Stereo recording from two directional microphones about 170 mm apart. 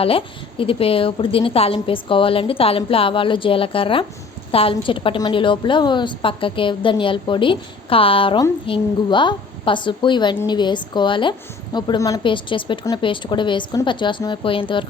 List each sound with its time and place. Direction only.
0.0 s a woman's voice: 30° left (ahead or behind)